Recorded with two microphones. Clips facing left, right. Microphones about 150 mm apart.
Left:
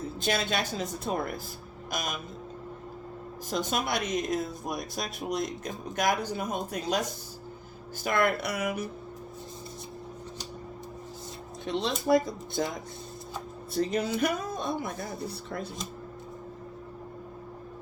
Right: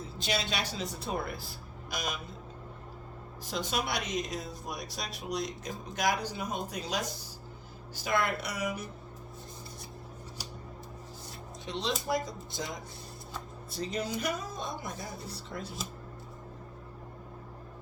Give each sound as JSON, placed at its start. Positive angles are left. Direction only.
{"t": 0.2, "sound": "speech", "side_deg": 50}
{"t": 3.5, "sound": "speech", "side_deg": 45}
{"t": 11.6, "sound": "speech", "side_deg": 55}
{"t": 13.7, "sound": "speech", "side_deg": 55}